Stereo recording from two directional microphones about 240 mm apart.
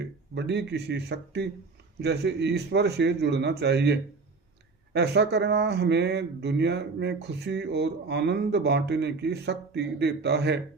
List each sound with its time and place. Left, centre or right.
0.0 s speech: right
4.9 s speech: right